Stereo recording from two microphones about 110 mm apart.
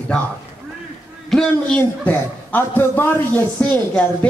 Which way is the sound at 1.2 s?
5° left (ahead or behind).